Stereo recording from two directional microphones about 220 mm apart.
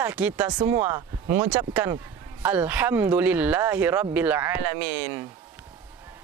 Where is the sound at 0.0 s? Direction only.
5° right (ahead or behind).